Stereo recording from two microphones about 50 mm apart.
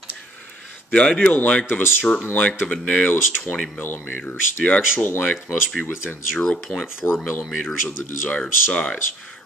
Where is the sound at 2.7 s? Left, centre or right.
Left.